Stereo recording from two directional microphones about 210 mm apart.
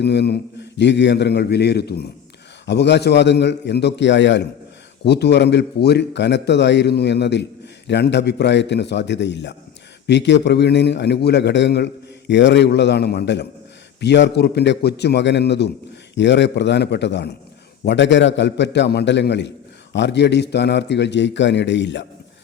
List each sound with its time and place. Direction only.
0.0 s a man's voice: 50° left (ahead or behind)